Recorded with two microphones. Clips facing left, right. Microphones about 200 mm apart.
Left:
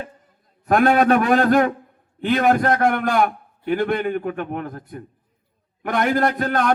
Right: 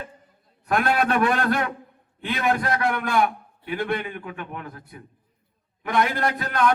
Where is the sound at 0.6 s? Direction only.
45° left (ahead or behind).